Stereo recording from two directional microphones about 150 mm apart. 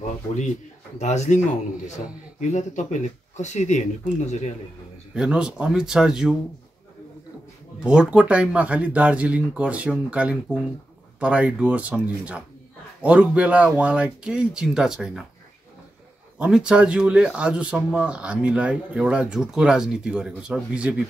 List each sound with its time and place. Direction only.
0.9 s speech: 50° left (ahead or behind)
2.5 s speech: 55° left (ahead or behind)
5.1 s speech: 5° right (ahead or behind)
7.8 s speech: 5° right (ahead or behind)
16.3 s speech: 5° right (ahead or behind)